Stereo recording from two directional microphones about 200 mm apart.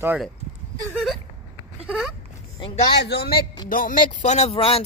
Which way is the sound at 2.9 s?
55° left (ahead or behind).